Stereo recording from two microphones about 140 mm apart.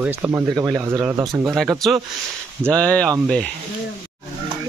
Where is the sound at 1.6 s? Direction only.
Centre (ahead or behind).